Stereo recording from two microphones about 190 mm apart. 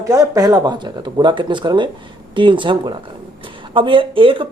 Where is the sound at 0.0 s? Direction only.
15° right (ahead or behind).